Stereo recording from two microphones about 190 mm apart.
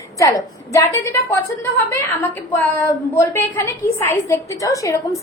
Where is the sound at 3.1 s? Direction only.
15° left (ahead or behind).